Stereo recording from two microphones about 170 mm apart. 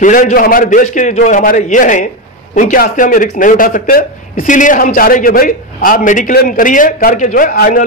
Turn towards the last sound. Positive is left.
turn(degrees=55)  # may be behind; listen again after turning